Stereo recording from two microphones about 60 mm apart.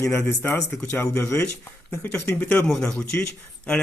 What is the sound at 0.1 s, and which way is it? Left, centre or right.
Speech, left.